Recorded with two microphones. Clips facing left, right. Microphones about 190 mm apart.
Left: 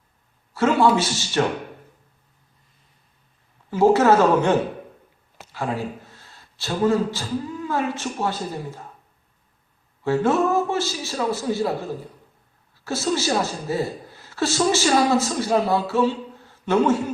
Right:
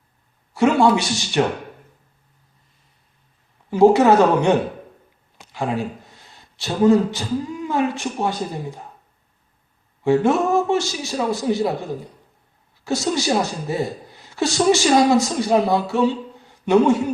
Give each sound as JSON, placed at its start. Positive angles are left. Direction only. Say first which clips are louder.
{"t": 0.5, "sound": "speech", "louder": "right 2 dB", "side_deg": -15}
{"t": 3.7, "sound": "speech", "louder": "right 3 dB", "side_deg": -15}
{"t": 10.0, "sound": "a man's voice", "louder": "right 3 dB", "side_deg": -15}
{"t": 12.7, "sound": "a woman's voice", "louder": "right 2 dB", "side_deg": -15}